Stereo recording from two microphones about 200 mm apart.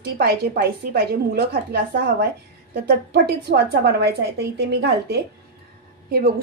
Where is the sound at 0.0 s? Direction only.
50° right (ahead or behind).